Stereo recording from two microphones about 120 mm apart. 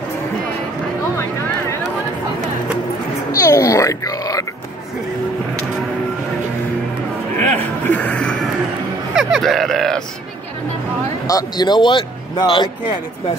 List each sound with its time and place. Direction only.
3.3 s music: 30° left (ahead or behind)
7.5 s a sound: 15° left (ahead or behind)
9.1 s grunt: centre (ahead or behind)
11.2 s speech: 30° left (ahead or behind)